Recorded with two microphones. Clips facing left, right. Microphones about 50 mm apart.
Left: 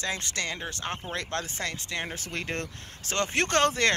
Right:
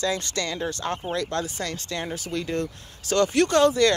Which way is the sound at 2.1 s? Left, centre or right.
Left.